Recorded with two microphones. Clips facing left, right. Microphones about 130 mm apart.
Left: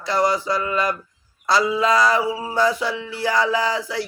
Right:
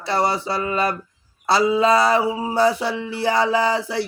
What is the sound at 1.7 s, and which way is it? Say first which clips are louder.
Mantra: right 2 dB; 25° right (ahead or behind).